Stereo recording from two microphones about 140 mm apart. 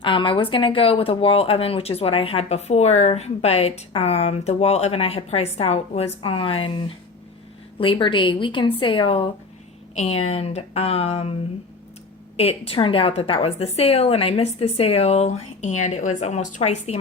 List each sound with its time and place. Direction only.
0.0 s a woman's voice: 35° left (ahead or behind)
9.9 s speech: 50° left (ahead or behind)
12.4 s speech: 45° left (ahead or behind)